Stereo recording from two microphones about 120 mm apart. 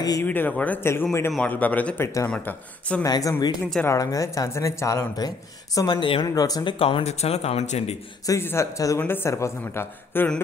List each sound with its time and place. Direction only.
0.2 s speech: 15° left (ahead or behind)
3.0 s speech: 30° left (ahead or behind); by 6.2 s 45° left (ahead or behind)
6.2 s speech: 30° left (ahead or behind)
6.8 s speech: 55° left (ahead or behind)
8.3 s speech: 20° left (ahead or behind)